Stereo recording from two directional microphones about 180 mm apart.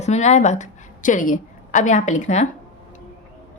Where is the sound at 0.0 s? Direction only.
40° left (ahead or behind).